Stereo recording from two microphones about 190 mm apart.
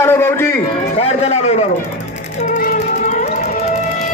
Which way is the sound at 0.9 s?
35° left (ahead or behind).